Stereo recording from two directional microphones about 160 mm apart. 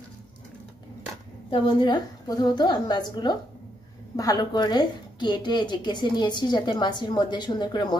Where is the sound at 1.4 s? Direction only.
30° left (ahead or behind).